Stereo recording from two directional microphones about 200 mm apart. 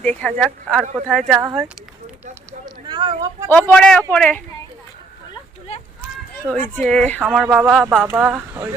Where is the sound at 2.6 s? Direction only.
20° right (ahead or behind).